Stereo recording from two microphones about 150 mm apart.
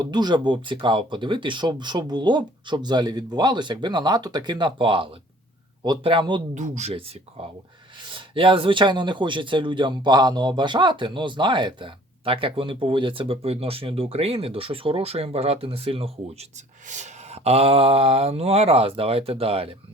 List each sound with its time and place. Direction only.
0.0 s speech: 30° right (ahead or behind)
6.5 s speech: 50° right (ahead or behind)
8.1 s speech: 35° right (ahead or behind)